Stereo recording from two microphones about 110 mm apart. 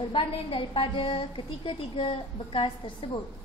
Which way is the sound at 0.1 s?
50° left (ahead or behind).